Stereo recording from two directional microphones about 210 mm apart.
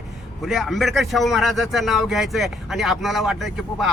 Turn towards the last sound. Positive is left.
turn(degrees=0)  # may be behind; listen again after turning